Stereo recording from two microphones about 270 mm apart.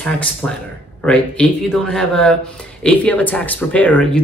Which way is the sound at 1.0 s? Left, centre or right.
Centre.